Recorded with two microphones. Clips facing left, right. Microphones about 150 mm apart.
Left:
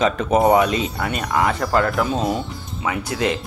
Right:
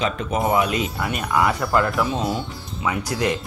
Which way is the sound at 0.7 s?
30° left (ahead or behind).